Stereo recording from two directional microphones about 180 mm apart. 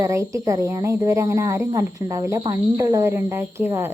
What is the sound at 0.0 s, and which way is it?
A woman's voice, 15° right (ahead or behind).